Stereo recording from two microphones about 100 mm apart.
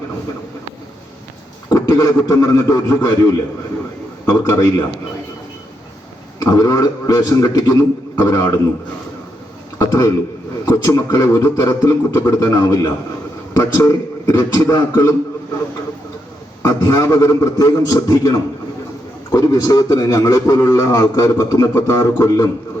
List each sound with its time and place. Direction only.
1.7 s a man's voice: 35° left (ahead or behind)
4.3 s a man's voice: 30° left (ahead or behind)
6.4 s a man's voice: 35° left (ahead or behind)
9.7 s a sound: 30° left (ahead or behind)
10.7 s a man's voice: 35° left (ahead or behind)
16.6 s a man's voice: 35° left (ahead or behind)